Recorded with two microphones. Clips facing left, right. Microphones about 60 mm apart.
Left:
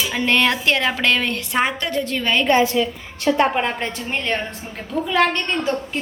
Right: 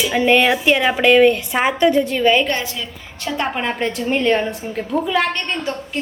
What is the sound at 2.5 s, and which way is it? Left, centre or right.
Speech, centre.